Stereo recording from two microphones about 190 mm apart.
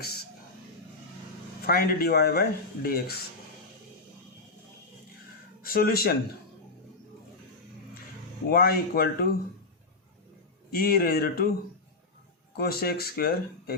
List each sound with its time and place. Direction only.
1.6 s speech: 50° left (ahead or behind)
5.6 s speech: 50° left (ahead or behind)
8.4 s speech: 50° left (ahead or behind)
10.8 s speech: 50° left (ahead or behind)
12.5 s speech: 55° left (ahead or behind)